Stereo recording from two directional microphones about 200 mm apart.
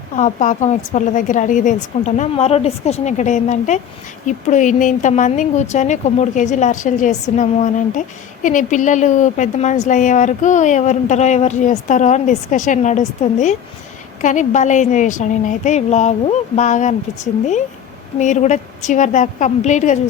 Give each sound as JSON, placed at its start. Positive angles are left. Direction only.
{"t": 0.2, "sound": "speech", "side_deg": 35}
{"t": 18.2, "sound": "speech", "side_deg": 35}